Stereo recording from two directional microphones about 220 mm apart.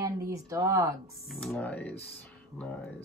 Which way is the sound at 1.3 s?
5° left (ahead or behind).